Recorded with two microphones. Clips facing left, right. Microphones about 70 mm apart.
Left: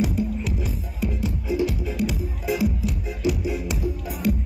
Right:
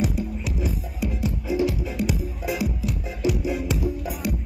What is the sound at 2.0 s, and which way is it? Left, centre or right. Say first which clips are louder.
Music: even; centre.